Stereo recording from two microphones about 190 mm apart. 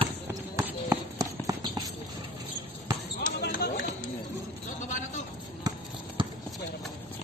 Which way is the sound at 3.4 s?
50° left (ahead or behind).